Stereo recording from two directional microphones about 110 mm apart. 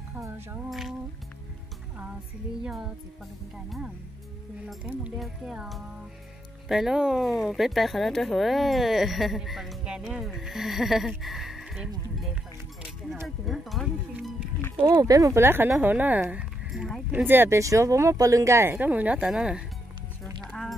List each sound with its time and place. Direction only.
0.7 s speech: centre (ahead or behind)
2.6 s speech: 5° right (ahead or behind)
13.5 s speech: centre (ahead or behind)
14.9 s speech: 35° right (ahead or behind); by 17.0 s 5° right (ahead or behind)
17.1 s speech: 20° right (ahead or behind)
20.4 s a sound: 5° left (ahead or behind)